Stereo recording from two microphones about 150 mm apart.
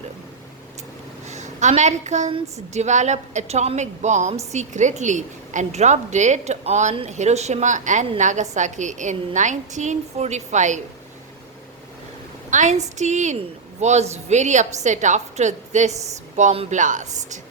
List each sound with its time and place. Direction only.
1.3 s a woman's voice: 50° right (ahead or behind)
12.5 s a woman's voice: 55° right (ahead or behind)